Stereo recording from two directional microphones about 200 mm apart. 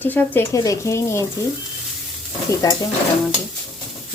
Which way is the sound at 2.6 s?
20° left (ahead or behind).